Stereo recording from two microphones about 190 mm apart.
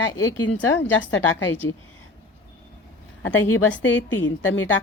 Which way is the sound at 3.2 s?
75° left (ahead or behind).